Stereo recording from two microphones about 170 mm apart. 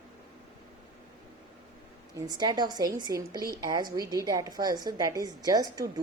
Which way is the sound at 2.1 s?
25° right (ahead or behind).